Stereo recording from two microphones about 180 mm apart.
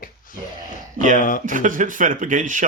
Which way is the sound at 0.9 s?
45° right (ahead or behind).